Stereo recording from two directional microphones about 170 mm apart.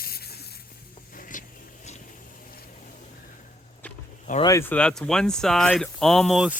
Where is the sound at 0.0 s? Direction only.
65° left (ahead or behind).